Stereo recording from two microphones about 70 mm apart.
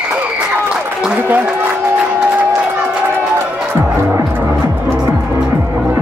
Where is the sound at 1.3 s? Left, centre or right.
Right.